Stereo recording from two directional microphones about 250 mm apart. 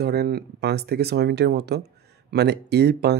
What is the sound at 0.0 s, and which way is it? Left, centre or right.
Speech, right.